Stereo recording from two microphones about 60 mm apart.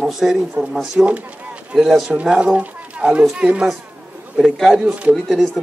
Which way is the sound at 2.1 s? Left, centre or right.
Centre.